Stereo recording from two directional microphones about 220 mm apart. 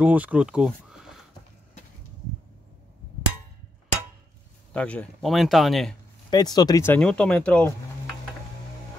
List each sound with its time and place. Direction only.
0.0 s speech: 5° right (ahead or behind)
4.7 s speech: 5° left (ahead or behind)
6.3 s speech: 20° left (ahead or behind)
6.9 s speech: 5° left (ahead or behind)